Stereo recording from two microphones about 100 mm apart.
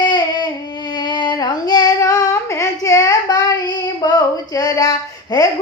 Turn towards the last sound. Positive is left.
turn(degrees=40)  # may be behind; listen again after turning